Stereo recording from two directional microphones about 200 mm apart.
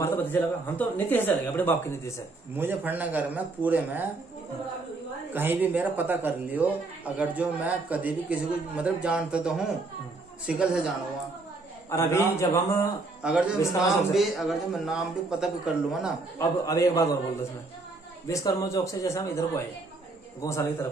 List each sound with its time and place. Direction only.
0.0 s speech: 10° left (ahead or behind)
2.5 s speech: 10° right (ahead or behind)
5.3 s a man's voice: 10° right (ahead or behind)
11.9 s speech: 15° left (ahead or behind)
13.2 s a man's voice: 5° right (ahead or behind)
16.3 s speech: 15° left (ahead or behind)